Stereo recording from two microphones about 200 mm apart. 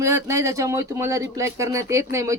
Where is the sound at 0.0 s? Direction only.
15° right (ahead or behind).